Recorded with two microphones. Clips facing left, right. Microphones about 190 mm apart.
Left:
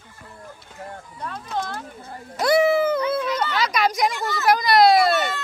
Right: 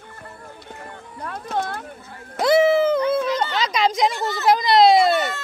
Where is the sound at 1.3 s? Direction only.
55° right (ahead or behind).